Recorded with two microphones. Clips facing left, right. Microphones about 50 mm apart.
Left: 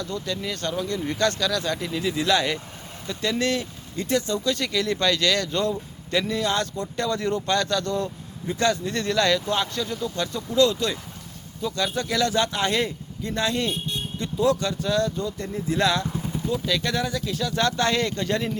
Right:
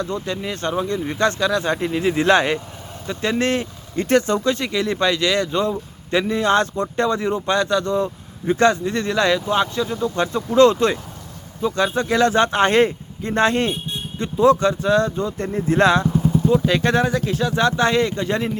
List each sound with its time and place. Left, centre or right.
0.0 s speech: right
4.5 s speech: right
7.2 s speech: centre
8.4 s speech: right
17.5 s speech: right